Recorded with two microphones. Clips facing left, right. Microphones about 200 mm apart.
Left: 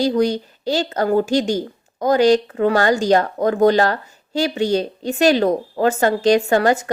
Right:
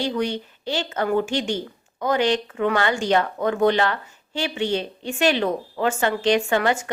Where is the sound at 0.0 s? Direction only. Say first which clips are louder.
Left 7 dB; 40° left (ahead or behind).